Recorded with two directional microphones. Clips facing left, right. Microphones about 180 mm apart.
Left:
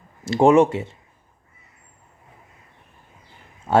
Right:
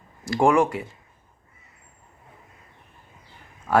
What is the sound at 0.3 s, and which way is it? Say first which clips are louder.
Speech: left 5 dB; 25° left (ahead or behind).